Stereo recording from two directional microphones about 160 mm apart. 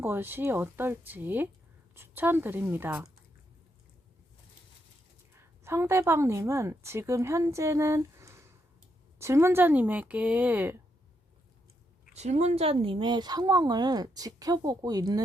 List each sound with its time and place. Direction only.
0.0 s speech: 15° right (ahead or behind)
5.3 s a woman's voice: 15° right (ahead or behind)
12.1 s a woman's voice: 45° right (ahead or behind); by 15.2 s 25° right (ahead or behind)